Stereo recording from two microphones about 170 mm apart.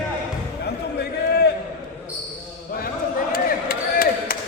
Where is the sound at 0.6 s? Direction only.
75° left (ahead or behind).